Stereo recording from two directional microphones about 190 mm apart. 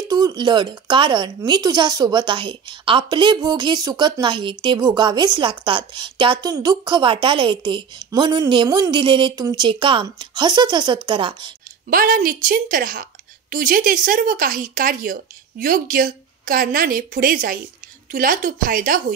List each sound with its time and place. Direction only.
0.1 s speech: 20° right (ahead or behind)
11.9 s a woman's voice: 50° right (ahead or behind)